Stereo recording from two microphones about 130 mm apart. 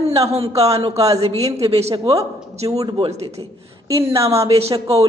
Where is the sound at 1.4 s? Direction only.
25° right (ahead or behind).